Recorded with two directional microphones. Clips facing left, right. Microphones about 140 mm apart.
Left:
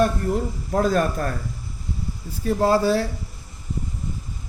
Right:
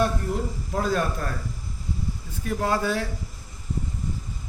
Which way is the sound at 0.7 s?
50° left (ahead or behind).